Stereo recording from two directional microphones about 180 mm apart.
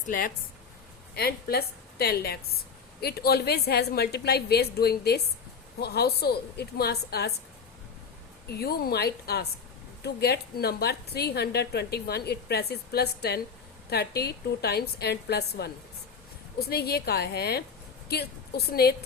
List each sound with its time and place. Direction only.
1.1 s a woman's voice: 60° left (ahead or behind)
8.4 s a woman's voice: 60° left (ahead or behind)